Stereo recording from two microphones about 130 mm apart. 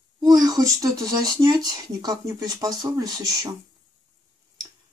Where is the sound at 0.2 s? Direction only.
30° right (ahead or behind).